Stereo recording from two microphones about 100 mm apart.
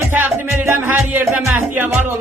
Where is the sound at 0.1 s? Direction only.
20° right (ahead or behind).